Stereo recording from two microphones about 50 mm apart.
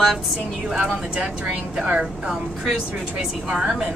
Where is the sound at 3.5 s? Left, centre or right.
Centre.